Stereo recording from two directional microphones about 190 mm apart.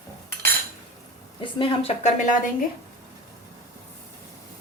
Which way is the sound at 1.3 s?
30° left (ahead or behind).